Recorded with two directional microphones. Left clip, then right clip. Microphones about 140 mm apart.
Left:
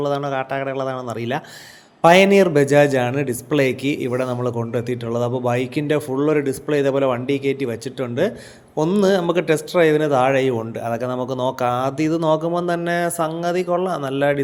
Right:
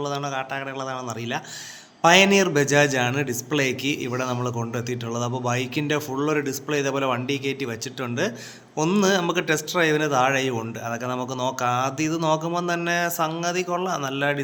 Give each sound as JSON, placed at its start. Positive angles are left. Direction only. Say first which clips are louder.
{"t": 0.0, "sound": "speech", "louder": "left 6 dB", "side_deg": 40}